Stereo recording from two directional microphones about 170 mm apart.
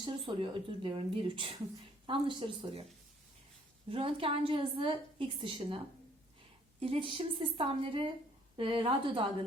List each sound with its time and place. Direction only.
0.0 s a woman's voice: 30° right (ahead or behind)
3.8 s a woman's voice: 30° right (ahead or behind)